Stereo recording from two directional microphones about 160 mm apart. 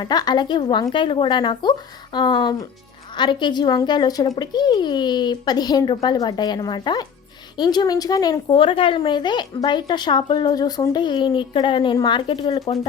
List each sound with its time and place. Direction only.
0.0 s a woman's voice: 25° left (ahead or behind)